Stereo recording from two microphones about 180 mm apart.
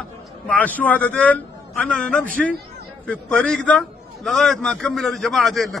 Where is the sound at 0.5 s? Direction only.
10° left (ahead or behind).